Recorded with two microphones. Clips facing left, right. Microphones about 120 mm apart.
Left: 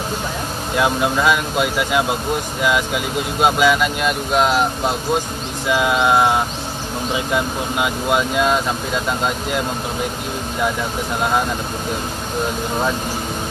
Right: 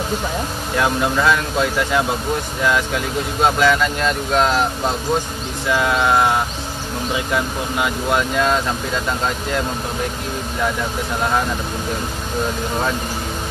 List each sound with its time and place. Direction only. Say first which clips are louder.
0.7 s speech: left 1 dB; 15° left (ahead or behind)